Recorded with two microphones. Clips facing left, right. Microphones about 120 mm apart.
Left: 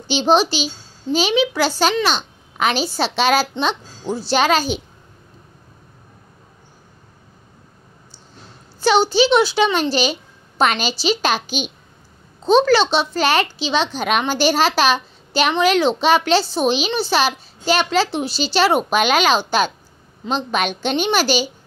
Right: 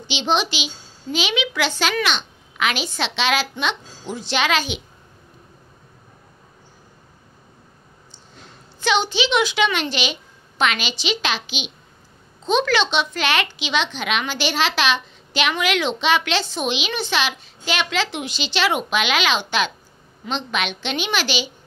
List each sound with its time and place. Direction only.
0.0 s a child's voice: 40° left (ahead or behind)
8.8 s speech: 40° left (ahead or behind)